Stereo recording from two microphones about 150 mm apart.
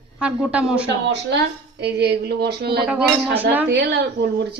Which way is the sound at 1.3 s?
90° right.